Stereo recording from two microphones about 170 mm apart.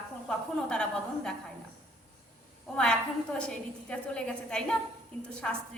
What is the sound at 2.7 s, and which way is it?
A woman's voice, 5° left (ahead or behind).